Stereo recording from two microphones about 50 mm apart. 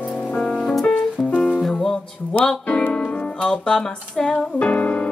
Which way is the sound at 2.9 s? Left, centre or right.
Left.